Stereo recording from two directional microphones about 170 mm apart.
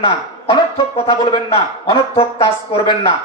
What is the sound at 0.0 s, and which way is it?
A man's voice, 30° left (ahead or behind).